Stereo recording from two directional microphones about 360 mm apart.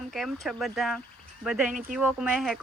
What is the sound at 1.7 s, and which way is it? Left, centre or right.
Speech, right.